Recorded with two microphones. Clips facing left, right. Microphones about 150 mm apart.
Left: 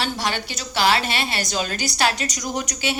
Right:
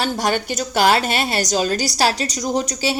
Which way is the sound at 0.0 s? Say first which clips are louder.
Right 5 dB; 45° right (ahead or behind).